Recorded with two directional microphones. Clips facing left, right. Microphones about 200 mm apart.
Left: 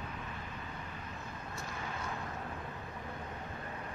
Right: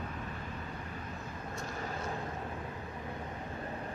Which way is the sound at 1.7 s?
40° right (ahead or behind).